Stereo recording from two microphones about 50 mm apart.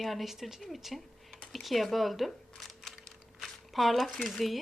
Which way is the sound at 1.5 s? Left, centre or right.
Centre.